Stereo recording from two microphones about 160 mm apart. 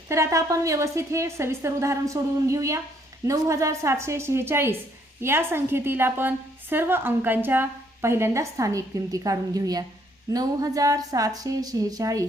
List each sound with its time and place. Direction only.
0.1 s a woman's voice: 20° right (ahead or behind)